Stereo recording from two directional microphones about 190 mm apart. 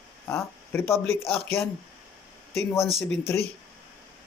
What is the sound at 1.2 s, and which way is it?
Speech, 30° left (ahead or behind).